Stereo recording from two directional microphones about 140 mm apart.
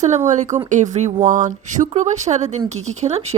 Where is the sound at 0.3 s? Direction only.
60° right (ahead or behind).